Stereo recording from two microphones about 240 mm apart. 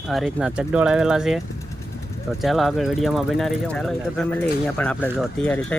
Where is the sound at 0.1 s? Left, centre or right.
Centre.